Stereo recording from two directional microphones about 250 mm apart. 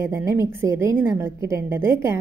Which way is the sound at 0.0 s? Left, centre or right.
Centre.